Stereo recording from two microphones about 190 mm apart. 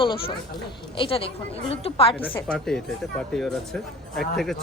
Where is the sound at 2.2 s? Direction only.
10° left (ahead or behind).